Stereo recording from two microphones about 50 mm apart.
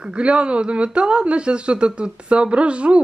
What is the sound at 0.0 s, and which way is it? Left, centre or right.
Speech, right.